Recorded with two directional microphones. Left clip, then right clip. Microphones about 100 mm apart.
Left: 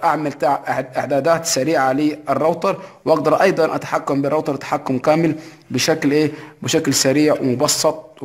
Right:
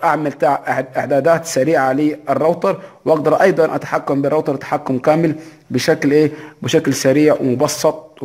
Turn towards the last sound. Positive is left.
turn(degrees=-25)  # may be behind; listen again after turning